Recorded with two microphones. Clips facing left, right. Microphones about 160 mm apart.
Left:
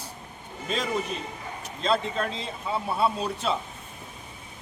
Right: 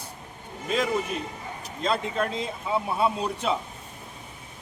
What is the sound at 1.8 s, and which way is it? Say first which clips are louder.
A man's voice: even; 10° right (ahead or behind).